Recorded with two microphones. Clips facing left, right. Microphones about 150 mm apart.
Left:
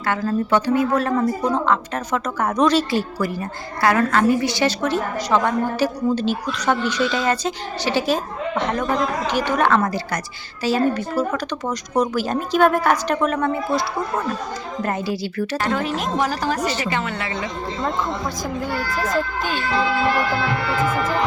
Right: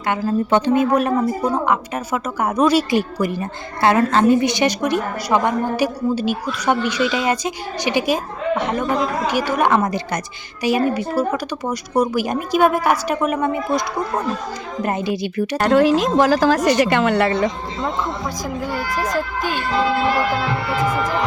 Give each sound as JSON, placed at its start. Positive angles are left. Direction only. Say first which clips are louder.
{"t": 0.3, "sound": "a woman's voice", "louder": "right 3 dB", "side_deg": -20}
{"t": 15.7, "sound": "a woman's voice", "louder": "right 8 dB", "side_deg": -85}
{"t": 16.8, "sound": "a woman's voice", "louder": "right 9 dB", "side_deg": -70}
{"t": 18.4, "sound": "a woman's voice", "louder": "right 2 dB", "side_deg": -10}
{"t": 20.3, "sound": "music", "louder": "right 1 dB", "side_deg": -5}